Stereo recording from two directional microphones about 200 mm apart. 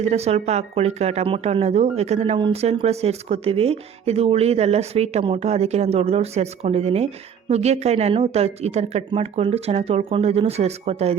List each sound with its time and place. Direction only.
0.0 s speech: 30° right (ahead or behind)